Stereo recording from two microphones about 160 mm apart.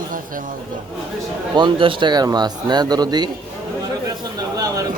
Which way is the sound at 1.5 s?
30° right (ahead or behind).